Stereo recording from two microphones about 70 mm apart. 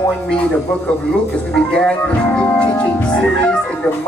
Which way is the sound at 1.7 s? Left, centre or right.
Centre.